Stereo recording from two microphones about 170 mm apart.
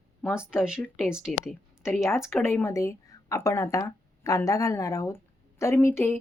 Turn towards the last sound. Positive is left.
turn(degrees=15)  # may be behind; listen again after turning